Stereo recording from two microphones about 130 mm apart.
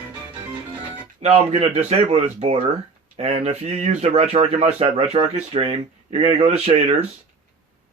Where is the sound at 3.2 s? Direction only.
60° right (ahead or behind).